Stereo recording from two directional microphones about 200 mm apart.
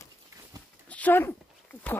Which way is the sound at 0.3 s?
15° right (ahead or behind).